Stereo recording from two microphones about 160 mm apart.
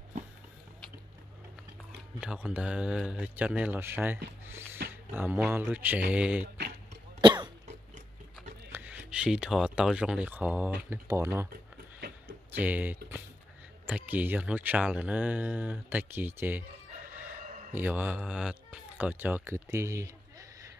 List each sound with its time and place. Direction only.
2.1 s speech: 5° right (ahead or behind)
4.8 s a sound: 90° right
5.1 s speech: 10° right (ahead or behind)
7.2 s cough: 25° right (ahead or behind)
8.7 s speech: 10° right (ahead or behind)
12.4 s speech: 10° right (ahead or behind)
17.7 s speech: 10° right (ahead or behind)